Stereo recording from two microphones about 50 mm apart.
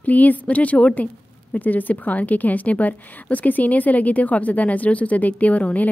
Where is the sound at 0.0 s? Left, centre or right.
Left.